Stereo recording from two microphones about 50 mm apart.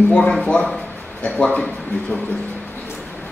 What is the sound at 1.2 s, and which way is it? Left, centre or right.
Speech, left.